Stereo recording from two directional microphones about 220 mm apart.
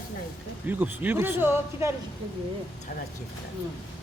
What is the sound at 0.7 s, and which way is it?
A man's voice, 10° right (ahead or behind).